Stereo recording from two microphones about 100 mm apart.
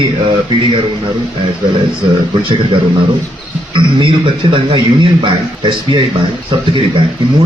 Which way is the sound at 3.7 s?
55° right (ahead or behind).